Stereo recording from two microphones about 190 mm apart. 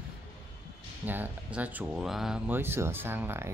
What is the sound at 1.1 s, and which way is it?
Speech, 10° right (ahead or behind).